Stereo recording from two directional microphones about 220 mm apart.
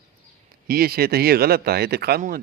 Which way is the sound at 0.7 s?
45° right (ahead or behind).